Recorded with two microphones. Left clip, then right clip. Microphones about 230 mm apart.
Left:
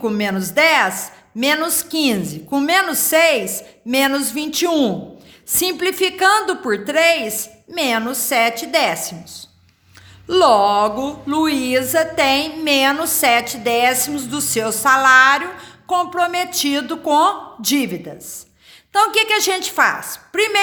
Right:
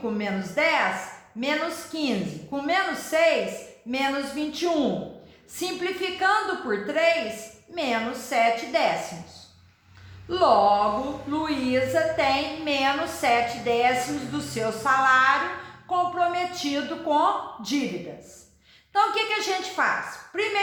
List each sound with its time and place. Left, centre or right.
0.0 s a woman's voice: left
10.2 s a woman's voice: left
18.9 s a woman's voice: left